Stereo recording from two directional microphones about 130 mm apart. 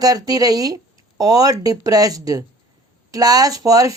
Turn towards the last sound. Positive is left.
turn(degrees=-25)  # may be behind; listen again after turning